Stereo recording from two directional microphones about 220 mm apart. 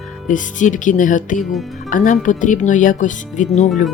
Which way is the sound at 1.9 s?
35° left (ahead or behind).